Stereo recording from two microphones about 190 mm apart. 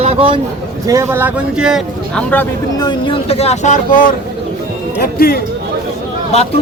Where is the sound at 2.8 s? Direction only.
25° left (ahead or behind).